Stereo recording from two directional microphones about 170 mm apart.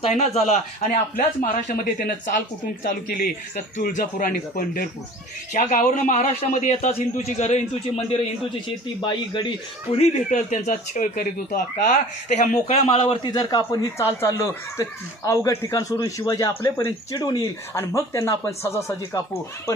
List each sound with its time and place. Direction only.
0.0 s a man's voice: 40° left (ahead or behind)
1.1 s speech: 50° left (ahead or behind)
3.5 s a man's voice: 50° left (ahead or behind)
8.5 s a man's voice: 25° left (ahead or behind)
9.9 s a man's voice: 45° left (ahead or behind)
12.4 s a man's voice: 40° left (ahead or behind); by 19.7 s 15° left (ahead or behind)